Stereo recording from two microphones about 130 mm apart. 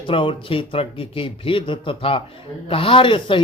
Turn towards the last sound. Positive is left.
turn(degrees=40)  # may be behind; listen again after turning